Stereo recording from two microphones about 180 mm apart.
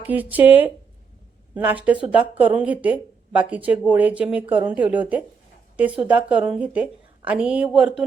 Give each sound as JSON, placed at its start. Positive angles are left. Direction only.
{"t": 0.1, "sound": "speech", "side_deg": -10}